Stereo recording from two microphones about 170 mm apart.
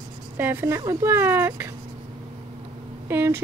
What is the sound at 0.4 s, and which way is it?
Speech, 15° right (ahead or behind).